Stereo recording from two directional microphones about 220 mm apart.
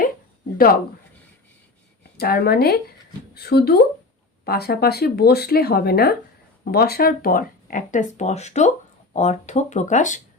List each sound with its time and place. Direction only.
2.1 s speech: 45° left (ahead or behind)